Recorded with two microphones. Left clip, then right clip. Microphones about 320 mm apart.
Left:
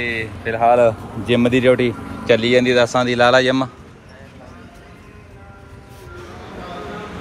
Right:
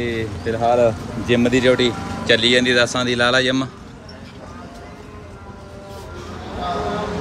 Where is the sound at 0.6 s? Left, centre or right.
Left.